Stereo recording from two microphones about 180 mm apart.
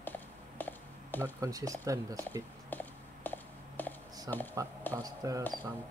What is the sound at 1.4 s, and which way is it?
Speech, 20° right (ahead or behind).